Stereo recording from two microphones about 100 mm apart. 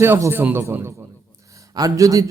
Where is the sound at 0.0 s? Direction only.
25° right (ahead or behind).